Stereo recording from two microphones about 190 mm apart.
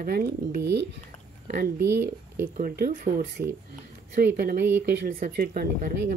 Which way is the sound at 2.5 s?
50° right (ahead or behind).